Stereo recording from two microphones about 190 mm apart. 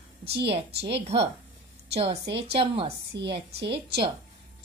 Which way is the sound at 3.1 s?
65° right (ahead or behind).